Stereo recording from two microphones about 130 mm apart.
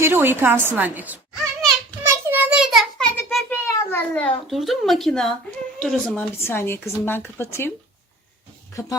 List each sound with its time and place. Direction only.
0.0 s a woman's voice: 15° right (ahead or behind)
2.0 s child singing: 15° right (ahead or behind)
2.6 s a sound: centre (ahead or behind)
3.5 s a sound: 15° left (ahead or behind)
4.5 s speech: centre (ahead or behind)
6.4 s speech: 20° left (ahead or behind)